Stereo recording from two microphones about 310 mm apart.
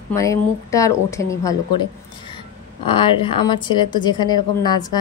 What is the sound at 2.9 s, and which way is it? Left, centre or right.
Speech, centre.